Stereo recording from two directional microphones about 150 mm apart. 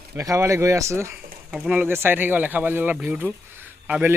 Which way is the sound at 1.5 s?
5° right (ahead or behind).